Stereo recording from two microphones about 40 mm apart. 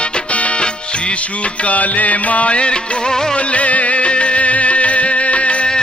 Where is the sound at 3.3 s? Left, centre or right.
Left.